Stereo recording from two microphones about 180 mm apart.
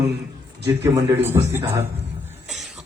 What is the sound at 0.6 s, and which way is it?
Speech, 15° right (ahead or behind).